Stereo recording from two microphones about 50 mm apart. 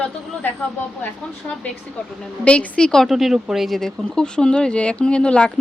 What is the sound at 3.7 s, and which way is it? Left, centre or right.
Speech, centre.